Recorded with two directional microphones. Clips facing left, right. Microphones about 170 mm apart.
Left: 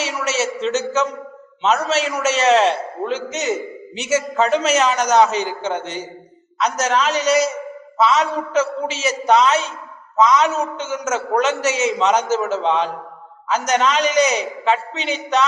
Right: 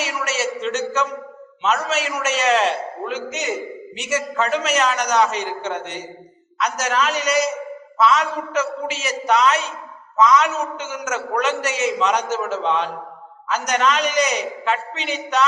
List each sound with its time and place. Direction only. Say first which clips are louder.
0.0 s a sound: left 2 dB; centre (ahead or behind)
1.6 s a man's voice: left 3 dB; centre (ahead or behind)
8.5 s a man's voice: left 4 dB; centre (ahead or behind)